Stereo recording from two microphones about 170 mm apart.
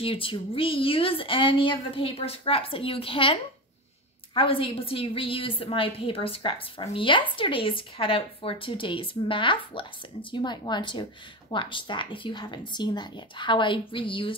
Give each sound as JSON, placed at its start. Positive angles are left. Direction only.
{"t": 0.0, "sound": "a woman's voice", "side_deg": 30}